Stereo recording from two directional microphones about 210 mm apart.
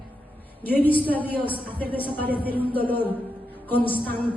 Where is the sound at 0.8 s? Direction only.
10° left (ahead or behind).